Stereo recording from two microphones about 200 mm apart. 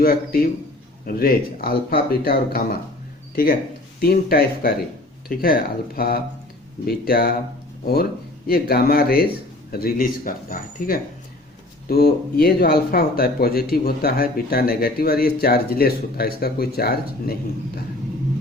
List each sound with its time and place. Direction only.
0.0 s speech: 50° left (ahead or behind)
8.4 s speech: 50° left (ahead or behind)